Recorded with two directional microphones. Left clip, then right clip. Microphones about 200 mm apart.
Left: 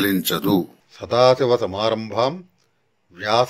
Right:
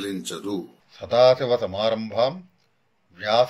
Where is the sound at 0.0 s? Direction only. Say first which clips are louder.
Left 10 dB; 40° left (ahead or behind).